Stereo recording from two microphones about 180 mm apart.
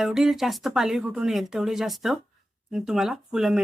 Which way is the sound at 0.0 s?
Centre (ahead or behind).